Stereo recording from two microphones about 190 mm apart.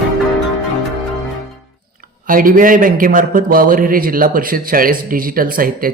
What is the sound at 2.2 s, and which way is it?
A man's voice, 45° right (ahead or behind).